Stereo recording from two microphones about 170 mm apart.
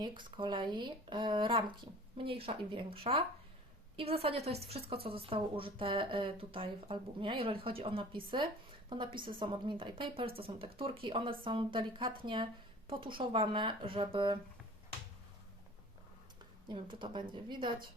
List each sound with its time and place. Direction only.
0.0 s speech: 30° right (ahead or behind)
16.6 s speech: 30° right (ahead or behind)